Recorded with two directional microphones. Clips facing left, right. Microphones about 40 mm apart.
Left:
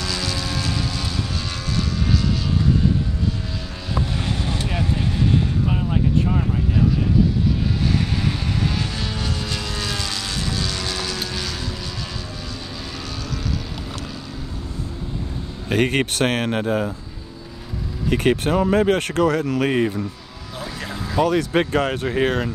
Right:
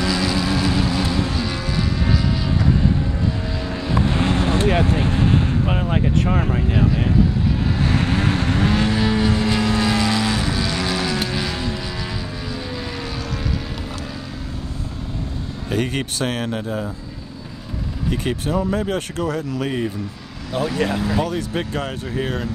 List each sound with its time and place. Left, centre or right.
0.0 s vehicle: centre
3.9 s music: right
7.8 s vehicle: right
8.9 s vehicle: right
15.7 s speech: left
18.1 s speech: left
20.5 s speech: right
21.2 s speech: left
21.5 s speech: left